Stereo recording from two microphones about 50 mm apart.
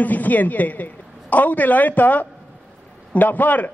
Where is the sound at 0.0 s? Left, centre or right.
Left.